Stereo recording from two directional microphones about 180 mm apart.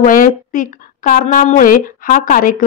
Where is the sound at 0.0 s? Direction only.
50° left (ahead or behind).